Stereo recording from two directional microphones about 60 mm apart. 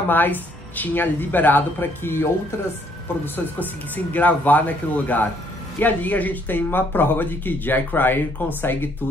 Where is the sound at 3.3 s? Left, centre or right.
Left.